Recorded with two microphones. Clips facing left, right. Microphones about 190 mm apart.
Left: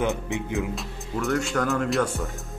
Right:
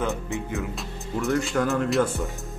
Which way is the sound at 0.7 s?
Centre (ahead or behind).